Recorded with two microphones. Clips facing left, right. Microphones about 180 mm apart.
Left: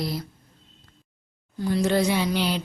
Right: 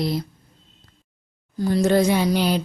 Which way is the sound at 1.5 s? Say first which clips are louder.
Right 4 dB; 40° right (ahead or behind).